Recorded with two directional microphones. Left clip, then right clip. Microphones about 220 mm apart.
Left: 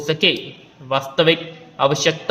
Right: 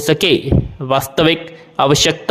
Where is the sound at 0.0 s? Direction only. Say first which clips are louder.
Right 4 dB; 50° right (ahead or behind).